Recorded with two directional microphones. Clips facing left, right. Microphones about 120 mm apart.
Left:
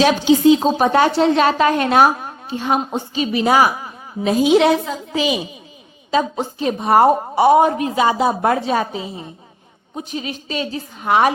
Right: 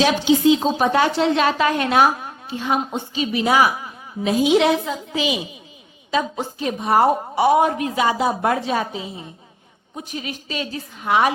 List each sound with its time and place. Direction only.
0.0 s a woman's voice: 40° left (ahead or behind)
6.9 s a woman's voice: 40° left (ahead or behind)
9.9 s a woman's voice: 25° left (ahead or behind)